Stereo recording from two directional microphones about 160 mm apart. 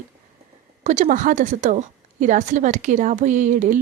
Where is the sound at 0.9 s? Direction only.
45° right (ahead or behind).